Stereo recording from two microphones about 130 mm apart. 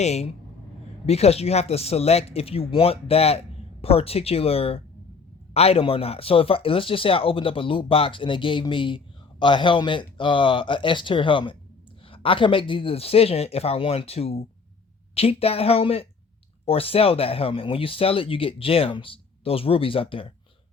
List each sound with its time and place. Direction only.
0.0 s speech: 60° left (ahead or behind)